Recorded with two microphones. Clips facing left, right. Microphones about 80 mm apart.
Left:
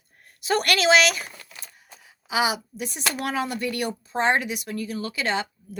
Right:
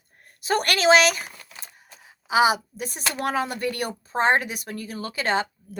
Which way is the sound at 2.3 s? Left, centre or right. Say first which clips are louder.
Right 5 dB; right.